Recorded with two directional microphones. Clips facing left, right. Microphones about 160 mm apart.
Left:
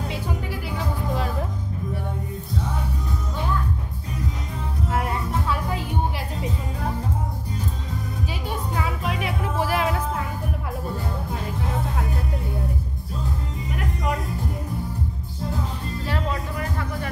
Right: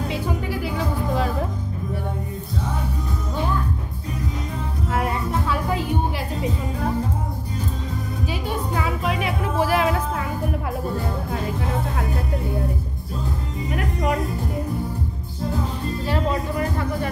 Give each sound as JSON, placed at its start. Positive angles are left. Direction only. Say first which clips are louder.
{"t": 0.1, "sound": "music", "louder": "right 4 dB", "side_deg": -90}
{"t": 4.9, "sound": "music", "louder": "right 3 dB", "side_deg": -90}
{"t": 8.3, "sound": "music", "louder": "right 4 dB", "side_deg": -90}
{"t": 13.7, "sound": "music", "louder": "right 4 dB", "side_deg": -75}
{"t": 16.1, "sound": "music", "louder": "right 5 dB", "side_deg": -30}